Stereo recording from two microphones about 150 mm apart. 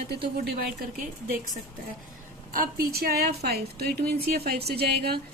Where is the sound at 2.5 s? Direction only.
80° right.